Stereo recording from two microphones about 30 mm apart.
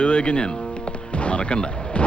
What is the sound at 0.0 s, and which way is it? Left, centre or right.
Music, left.